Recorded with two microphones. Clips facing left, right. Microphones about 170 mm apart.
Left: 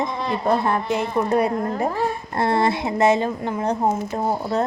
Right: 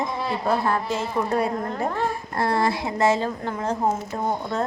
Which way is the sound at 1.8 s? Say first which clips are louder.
Left 3 dB; 5° left (ahead or behind).